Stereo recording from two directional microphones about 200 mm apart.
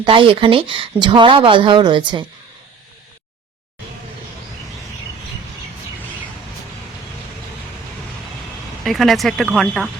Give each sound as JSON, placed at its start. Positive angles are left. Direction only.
{"t": 0.0, "sound": "speech", "side_deg": -25}
{"t": 8.8, "sound": "speech", "side_deg": 0}